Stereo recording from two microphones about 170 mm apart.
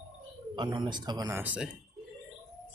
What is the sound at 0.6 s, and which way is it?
Speech, 25° right (ahead or behind).